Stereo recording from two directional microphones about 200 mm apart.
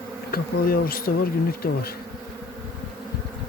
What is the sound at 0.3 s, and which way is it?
Bee, 50° left (ahead or behind).